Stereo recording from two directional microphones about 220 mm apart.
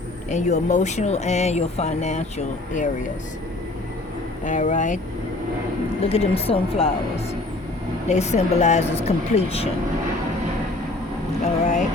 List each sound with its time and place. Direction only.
0.3 s speech: 30° left (ahead or behind)
4.4 s speech: 35° left (ahead or behind)
6.1 s speech: 25° left (ahead or behind)
8.0 s speech: 30° left (ahead or behind)
11.4 s speech: 30° left (ahead or behind)